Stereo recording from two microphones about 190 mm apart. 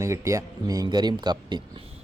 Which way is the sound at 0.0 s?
15° right (ahead or behind).